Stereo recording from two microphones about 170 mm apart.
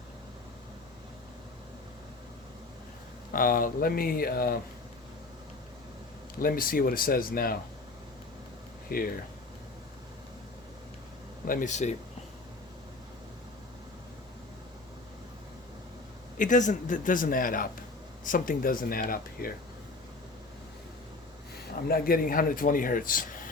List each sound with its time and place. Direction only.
3.3 s speech: 55° left (ahead or behind)
6.4 s speech: 60° left (ahead or behind)
8.9 s speech: 60° left (ahead or behind)
11.4 s a man's voice: 50° left (ahead or behind)
16.4 s a man's voice: 45° left (ahead or behind)
21.8 s speech: 60° left (ahead or behind)